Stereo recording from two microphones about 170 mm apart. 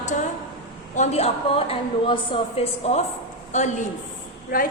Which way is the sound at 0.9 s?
40° left (ahead or behind).